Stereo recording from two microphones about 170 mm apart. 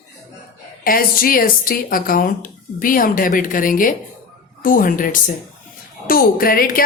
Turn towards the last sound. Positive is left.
turn(degrees=60)  # may be behind; listen again after turning